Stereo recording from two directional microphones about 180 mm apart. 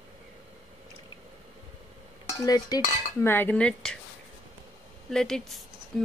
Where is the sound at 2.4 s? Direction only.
20° left (ahead or behind).